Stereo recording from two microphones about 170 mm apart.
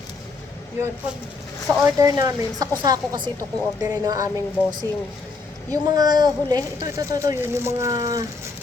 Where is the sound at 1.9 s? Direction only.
20° right (ahead or behind).